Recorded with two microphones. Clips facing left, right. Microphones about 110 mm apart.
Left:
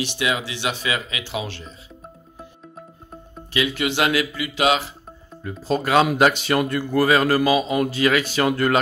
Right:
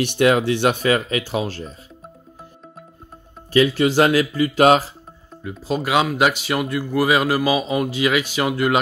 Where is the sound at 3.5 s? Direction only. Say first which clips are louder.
Right 7 dB; 35° right (ahead or behind).